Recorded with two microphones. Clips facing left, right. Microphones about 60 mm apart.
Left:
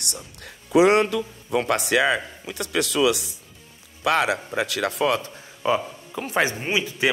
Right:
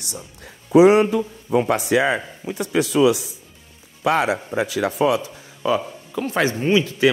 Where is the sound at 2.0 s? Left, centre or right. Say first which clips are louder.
Right 1 dB; right.